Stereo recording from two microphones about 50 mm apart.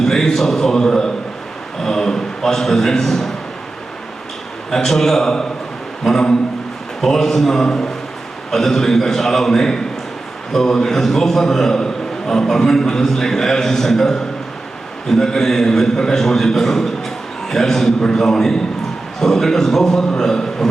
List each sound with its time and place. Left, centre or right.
0.0 s a man's voice: centre
4.7 s a man's voice: centre
6.0 s a sound: centre
7.0 s a man's voice: centre